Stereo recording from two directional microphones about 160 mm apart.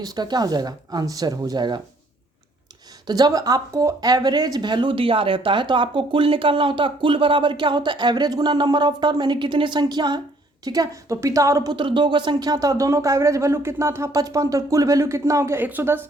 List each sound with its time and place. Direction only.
0.0 s speech: 25° right (ahead or behind)
3.1 s speech: 25° right (ahead or behind)